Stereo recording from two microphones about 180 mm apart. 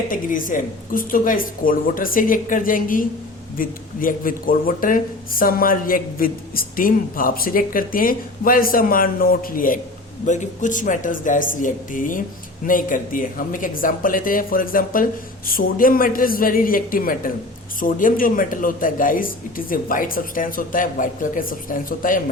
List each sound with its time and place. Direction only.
0.1 s speech: 50° left (ahead or behind)